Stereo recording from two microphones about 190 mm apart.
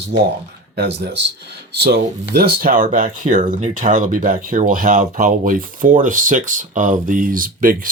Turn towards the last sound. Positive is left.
turn(degrees=-45)  # may be behind; listen again after turning